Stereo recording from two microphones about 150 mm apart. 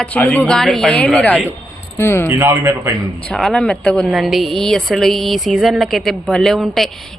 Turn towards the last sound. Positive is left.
turn(degrees=0)  # may be behind; listen again after turning